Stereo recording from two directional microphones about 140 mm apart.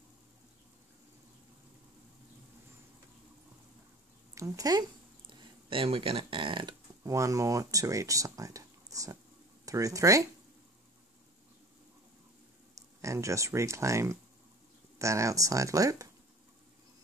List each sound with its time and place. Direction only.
4.4 s speech: 25° right (ahead or behind)
7.0 s speech: 25° right (ahead or behind)
13.0 s speech: 20° right (ahead or behind)